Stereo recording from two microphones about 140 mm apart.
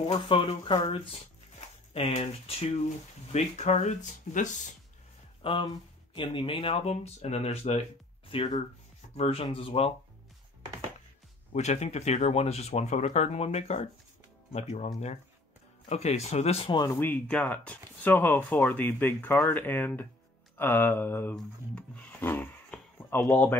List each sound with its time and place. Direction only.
0.0 s speech: 40° left (ahead or behind); by 4.7 s 65° left (ahead or behind)
5.4 s speech: 40° left (ahead or behind)
6.7 s speech: 50° left (ahead or behind)
8.3 s speech: 40° left (ahead or behind)
11.5 s speech: 55° left (ahead or behind)
15.9 s speech: 50° left (ahead or behind)
16.9 s speech: 15° left (ahead or behind)